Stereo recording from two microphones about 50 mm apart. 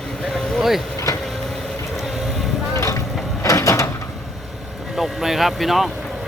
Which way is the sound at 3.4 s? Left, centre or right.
Left.